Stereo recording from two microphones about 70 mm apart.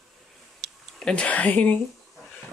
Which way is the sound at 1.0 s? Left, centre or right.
Centre.